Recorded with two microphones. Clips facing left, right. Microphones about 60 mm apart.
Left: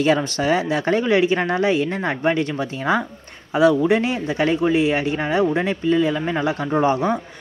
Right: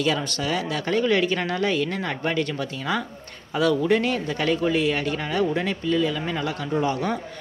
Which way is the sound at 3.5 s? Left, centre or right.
Centre.